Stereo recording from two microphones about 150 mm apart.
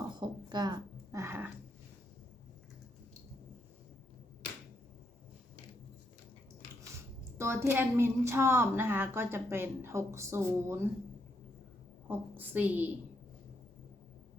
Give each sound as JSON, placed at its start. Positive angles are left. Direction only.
{"t": 0.1, "sound": "a sound", "side_deg": -30}
{"t": 7.3, "sound": "a woman's voice", "side_deg": -15}
{"t": 12.0, "sound": "a woman's voice", "side_deg": -10}